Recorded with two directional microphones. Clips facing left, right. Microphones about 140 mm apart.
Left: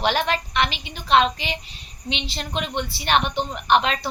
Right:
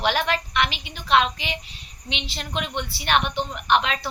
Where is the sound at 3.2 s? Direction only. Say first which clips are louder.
Left 2 dB; 35° left (ahead or behind).